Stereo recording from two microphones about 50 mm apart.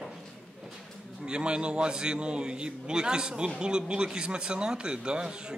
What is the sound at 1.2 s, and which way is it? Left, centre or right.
A man's voice, centre.